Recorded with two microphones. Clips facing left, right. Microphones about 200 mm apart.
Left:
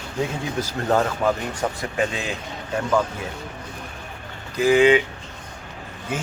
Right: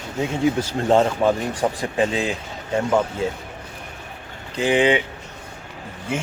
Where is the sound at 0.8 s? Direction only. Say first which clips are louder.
Right 3 dB; 25° right (ahead or behind).